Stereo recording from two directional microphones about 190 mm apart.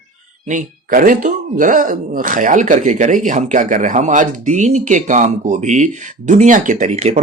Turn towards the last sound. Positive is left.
turn(degrees=-35)  # may be behind; listen again after turning